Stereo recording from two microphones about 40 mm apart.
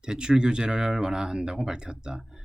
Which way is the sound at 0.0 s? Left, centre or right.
Right.